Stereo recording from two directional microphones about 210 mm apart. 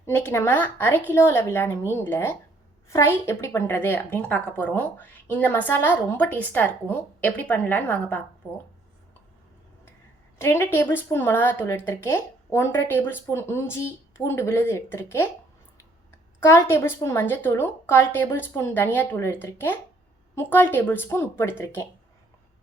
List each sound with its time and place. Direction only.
0.0 s a woman's voice: 10° left (ahead or behind)
10.3 s a woman's voice: 10° left (ahead or behind)
16.4 s a woman's voice: 10° left (ahead or behind)